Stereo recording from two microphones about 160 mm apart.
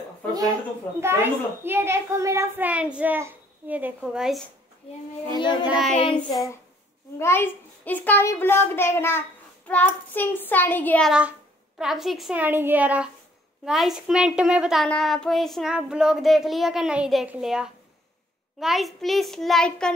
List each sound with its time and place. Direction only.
1.0 s a child's voice: 15° right (ahead or behind)
5.4 s speech: 30° left (ahead or behind)
5.7 s a child's voice: centre (ahead or behind)
7.2 s a child's voice: 15° left (ahead or behind)
11.1 s a child's voice: 5° right (ahead or behind)